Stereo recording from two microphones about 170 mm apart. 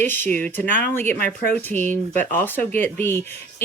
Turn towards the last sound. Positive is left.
turn(degrees=15)  # may be behind; listen again after turning